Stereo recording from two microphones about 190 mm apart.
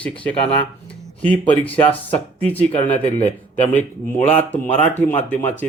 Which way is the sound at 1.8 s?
30° left (ahead or behind).